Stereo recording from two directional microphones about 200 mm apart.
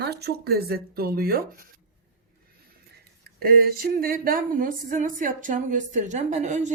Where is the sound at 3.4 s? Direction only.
50° right (ahead or behind).